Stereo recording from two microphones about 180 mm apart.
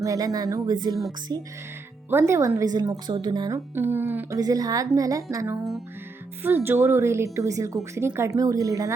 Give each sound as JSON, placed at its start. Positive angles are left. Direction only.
{"t": 0.0, "sound": "a woman's voice", "side_deg": -20}